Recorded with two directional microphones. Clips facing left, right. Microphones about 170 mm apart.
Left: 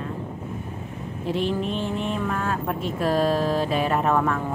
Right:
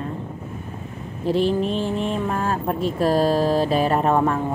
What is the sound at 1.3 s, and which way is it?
Speech, 35° right (ahead or behind).